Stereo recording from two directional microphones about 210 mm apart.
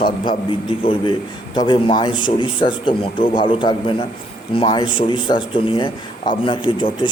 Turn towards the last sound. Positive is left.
turn(degrees=25)  # may be behind; listen again after turning